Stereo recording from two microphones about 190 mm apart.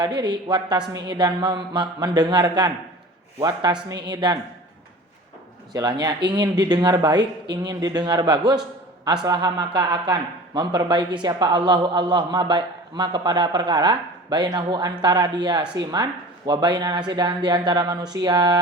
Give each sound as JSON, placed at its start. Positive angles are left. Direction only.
{"t": 0.0, "sound": "speech", "side_deg": -25}
{"t": 5.7, "sound": "speech", "side_deg": -20}
{"t": 7.2, "sound": "a woman's voice", "side_deg": -65}
{"t": 7.6, "sound": "speech", "side_deg": -20}